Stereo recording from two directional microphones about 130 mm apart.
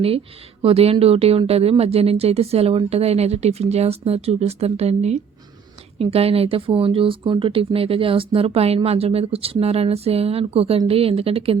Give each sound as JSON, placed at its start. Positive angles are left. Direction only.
{"t": 0.6, "sound": "speech", "side_deg": -50}